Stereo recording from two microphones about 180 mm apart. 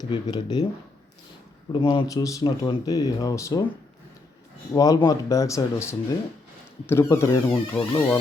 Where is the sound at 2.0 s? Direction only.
20° left (ahead or behind).